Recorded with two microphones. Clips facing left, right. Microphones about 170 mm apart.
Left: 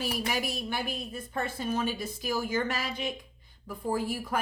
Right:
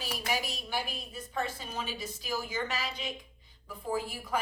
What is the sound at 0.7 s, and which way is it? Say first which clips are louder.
Speech: left 3 dB; 55° left (ahead or behind).